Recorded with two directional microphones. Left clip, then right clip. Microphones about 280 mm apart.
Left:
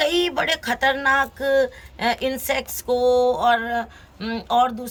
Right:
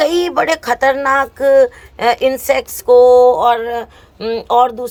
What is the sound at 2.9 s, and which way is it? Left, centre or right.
Speech, centre.